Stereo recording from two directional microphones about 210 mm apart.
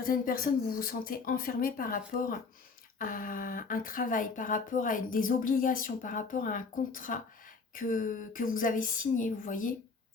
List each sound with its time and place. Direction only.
0.0 s speech: 40° left (ahead or behind)